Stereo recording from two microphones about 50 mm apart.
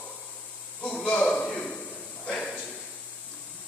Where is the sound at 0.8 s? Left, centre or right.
Centre.